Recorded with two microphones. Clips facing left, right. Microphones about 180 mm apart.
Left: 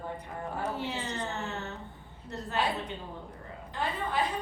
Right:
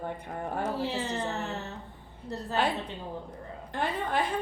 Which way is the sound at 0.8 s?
30° right (ahead or behind).